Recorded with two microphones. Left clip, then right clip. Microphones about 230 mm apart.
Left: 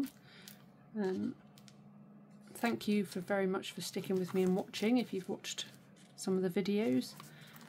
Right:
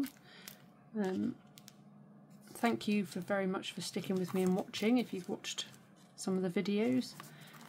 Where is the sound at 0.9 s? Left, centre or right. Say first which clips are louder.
Even; centre.